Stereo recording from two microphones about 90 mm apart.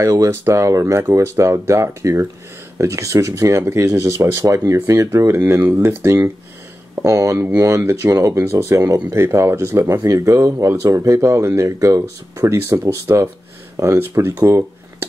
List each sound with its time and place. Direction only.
0.0 s speech: 35° right (ahead or behind)
8.1 s speech: 35° right (ahead or behind)
14.3 s speech: 45° right (ahead or behind)